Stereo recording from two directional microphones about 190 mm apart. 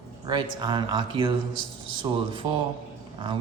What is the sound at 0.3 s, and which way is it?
A man's voice, 25° right (ahead or behind).